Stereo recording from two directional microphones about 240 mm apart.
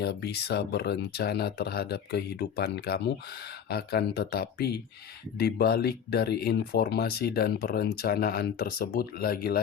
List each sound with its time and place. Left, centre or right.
0.0 s speech: left